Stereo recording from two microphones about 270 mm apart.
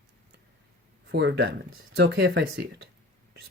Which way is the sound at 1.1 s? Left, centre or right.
Right.